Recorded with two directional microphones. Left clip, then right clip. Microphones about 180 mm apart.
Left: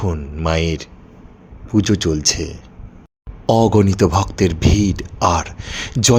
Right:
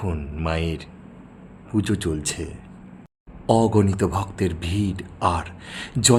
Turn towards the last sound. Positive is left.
turn(degrees=25)  # may be behind; listen again after turning